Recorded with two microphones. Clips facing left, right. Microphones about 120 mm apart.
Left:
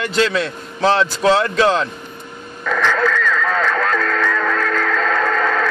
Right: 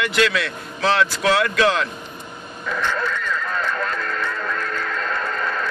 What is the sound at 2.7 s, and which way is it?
Music, 90° left.